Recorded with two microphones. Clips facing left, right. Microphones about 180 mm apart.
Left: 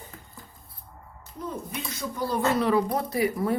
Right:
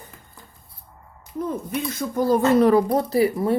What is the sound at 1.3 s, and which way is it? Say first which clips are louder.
Speech: right 8 dB; 55° right (ahead or behind).